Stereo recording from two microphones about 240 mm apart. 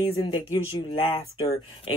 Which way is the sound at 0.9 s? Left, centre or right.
Left.